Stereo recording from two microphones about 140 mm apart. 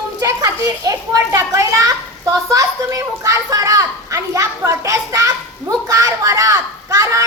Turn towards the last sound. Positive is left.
turn(degrees=-20)  # may be behind; listen again after turning